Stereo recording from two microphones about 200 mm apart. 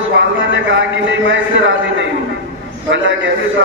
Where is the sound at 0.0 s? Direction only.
65° right (ahead or behind).